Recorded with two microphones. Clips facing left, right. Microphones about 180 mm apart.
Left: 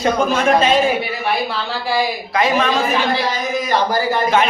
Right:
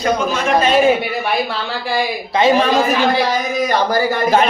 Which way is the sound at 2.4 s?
30° right (ahead or behind).